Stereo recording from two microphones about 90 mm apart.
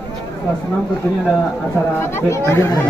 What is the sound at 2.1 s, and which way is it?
Speech, 30° left (ahead or behind).